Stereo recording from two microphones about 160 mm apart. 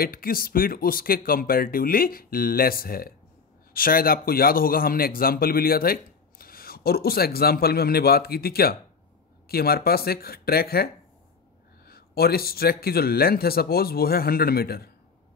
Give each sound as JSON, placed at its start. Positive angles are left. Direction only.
{"t": 0.0, "sound": "a man's voice", "side_deg": 65}